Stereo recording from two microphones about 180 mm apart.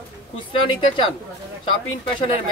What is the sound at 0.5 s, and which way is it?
Speech, 30° left (ahead or behind).